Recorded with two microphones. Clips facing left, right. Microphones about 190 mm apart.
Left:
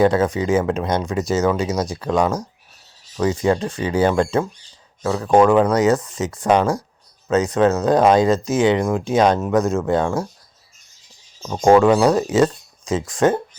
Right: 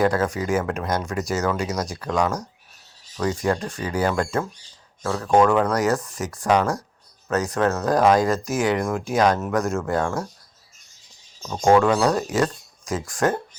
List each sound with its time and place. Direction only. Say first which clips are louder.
0.0 s speech: left 5 dB; 20° left (ahead or behind)
11.4 s speech: left 4 dB; 25° left (ahead or behind)